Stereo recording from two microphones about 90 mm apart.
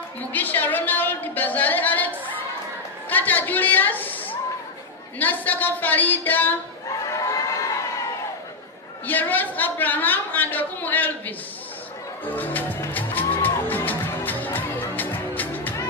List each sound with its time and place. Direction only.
0.3 s a sound: 20° left (ahead or behind)
5.2 s a woman's voice: 20° left (ahead or behind)
7.1 s crowd: 35° left (ahead or behind)
9.0 s a woman's voice: 20° left (ahead or behind)
12.3 s music: 20° left (ahead or behind)